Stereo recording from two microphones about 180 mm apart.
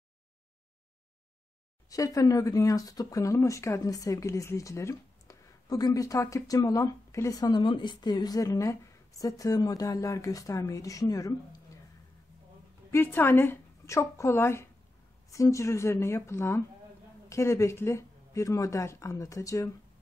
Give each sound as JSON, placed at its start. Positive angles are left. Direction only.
{"t": 1.9, "sound": "speech", "side_deg": 20}
{"t": 12.9, "sound": "speech", "side_deg": 10}